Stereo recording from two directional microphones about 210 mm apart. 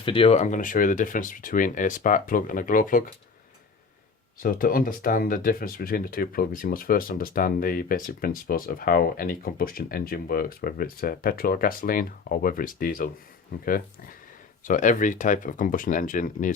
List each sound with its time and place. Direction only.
0.0 s speech: 25° left (ahead or behind)
4.4 s speech: 45° left (ahead or behind)